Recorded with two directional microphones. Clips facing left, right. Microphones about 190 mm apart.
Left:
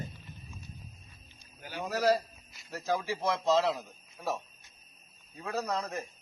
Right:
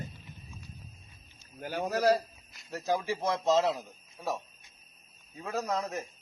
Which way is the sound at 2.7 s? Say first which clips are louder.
Right 2 dB; 15° right (ahead or behind).